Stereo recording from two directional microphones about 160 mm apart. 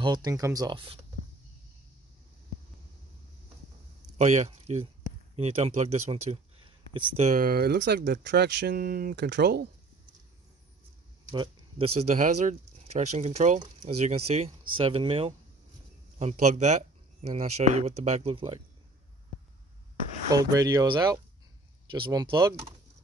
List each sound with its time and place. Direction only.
0.0 s speech: 25° right (ahead or behind)
4.2 s speech: 45° right (ahead or behind); by 7.2 s 30° right (ahead or behind)
7.2 s speech: 60° right (ahead or behind); by 9.7 s 85° right
12.0 s speech: 45° right (ahead or behind)
20.2 s speech: 25° right (ahead or behind)